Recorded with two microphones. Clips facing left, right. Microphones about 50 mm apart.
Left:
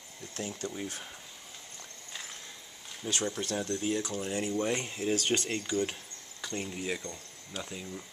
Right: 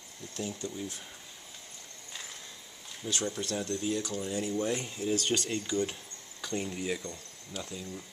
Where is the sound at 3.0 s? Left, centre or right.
Left.